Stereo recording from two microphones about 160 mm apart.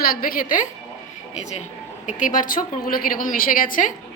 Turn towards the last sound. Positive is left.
turn(degrees=60)  # may be behind; listen again after turning